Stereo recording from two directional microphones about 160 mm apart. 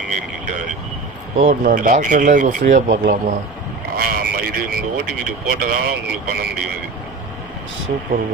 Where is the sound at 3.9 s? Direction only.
70° right (ahead or behind); by 6.5 s 90° right.